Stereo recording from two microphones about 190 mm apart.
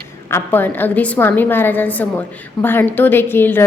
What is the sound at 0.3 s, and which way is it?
A woman's voice, 10° left (ahead or behind).